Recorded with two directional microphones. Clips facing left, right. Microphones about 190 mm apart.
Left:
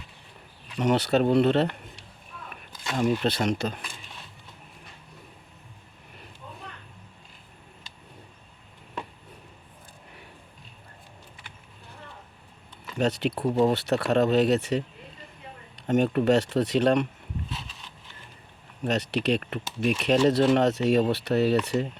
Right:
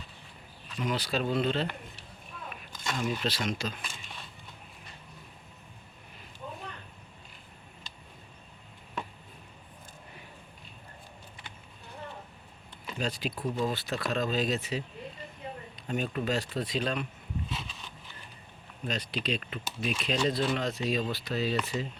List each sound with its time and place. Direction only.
0.8 s speech: 70° left (ahead or behind)
3.1 s speech: 60° left (ahead or behind)
13.0 s speech: 70° left (ahead or behind)
18.9 s speech: 70° left (ahead or behind)